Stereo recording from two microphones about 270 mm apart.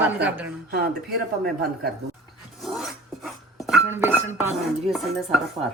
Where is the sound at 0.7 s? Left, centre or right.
Right.